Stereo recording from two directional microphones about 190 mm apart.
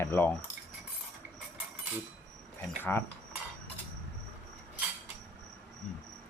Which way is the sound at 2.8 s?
10° left (ahead or behind).